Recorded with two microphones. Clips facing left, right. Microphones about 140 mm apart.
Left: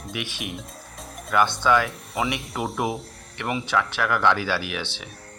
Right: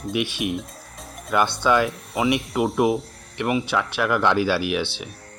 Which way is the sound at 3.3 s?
20° right (ahead or behind).